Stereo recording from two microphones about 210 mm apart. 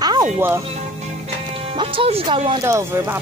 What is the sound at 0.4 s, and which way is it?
Speech, 15° right (ahead or behind).